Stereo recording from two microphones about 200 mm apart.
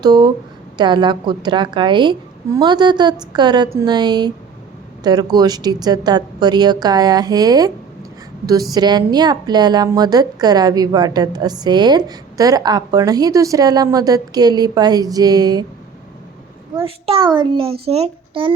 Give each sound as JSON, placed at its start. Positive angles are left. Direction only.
{"t": 0.0, "sound": "a woman's voice", "side_deg": -20}
{"t": 8.7, "sound": "a woman's voice", "side_deg": -20}
{"t": 16.7, "sound": "a woman's voice", "side_deg": -25}